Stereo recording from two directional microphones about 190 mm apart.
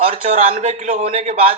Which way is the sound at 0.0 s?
35° right (ahead or behind).